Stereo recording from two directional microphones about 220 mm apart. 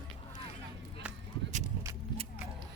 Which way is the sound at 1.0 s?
5° right (ahead or behind).